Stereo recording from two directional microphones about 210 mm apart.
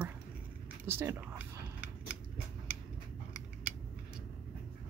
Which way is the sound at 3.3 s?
5° right (ahead or behind).